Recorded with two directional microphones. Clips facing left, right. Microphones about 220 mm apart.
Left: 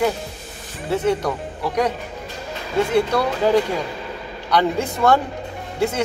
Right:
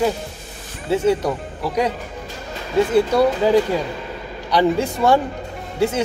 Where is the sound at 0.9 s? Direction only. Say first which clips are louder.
Right 2 dB; 10° right (ahead or behind).